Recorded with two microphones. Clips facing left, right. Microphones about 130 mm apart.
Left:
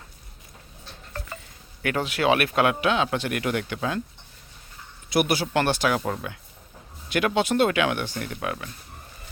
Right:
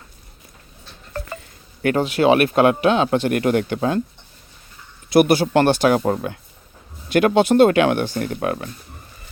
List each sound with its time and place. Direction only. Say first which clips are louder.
1.1 s a sound: right 7 dB; 50° right (ahead or behind)
2.0 s speech: right 6 dB; 35° right (ahead or behind)
5.1 s speech: right 8 dB; 55° right (ahead or behind)
6.0 s speech: right 8 dB; 40° right (ahead or behind)